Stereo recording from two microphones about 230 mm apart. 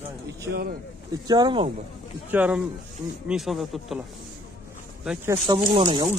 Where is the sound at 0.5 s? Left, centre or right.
Right.